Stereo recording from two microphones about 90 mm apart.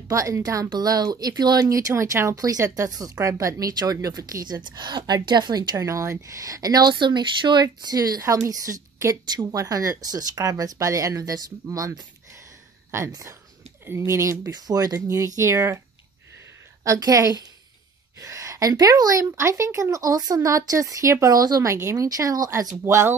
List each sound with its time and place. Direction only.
0.1 s a woman's voice: 35° right (ahead or behind)
14.5 s a woman's voice: 45° right (ahead or behind)
16.8 s a woman's voice: 40° right (ahead or behind)